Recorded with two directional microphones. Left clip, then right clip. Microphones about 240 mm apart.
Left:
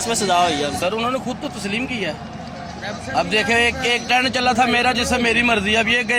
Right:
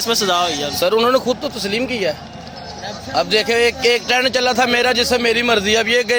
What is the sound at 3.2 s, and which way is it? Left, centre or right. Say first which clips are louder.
A man's voice: right 2 dB; right.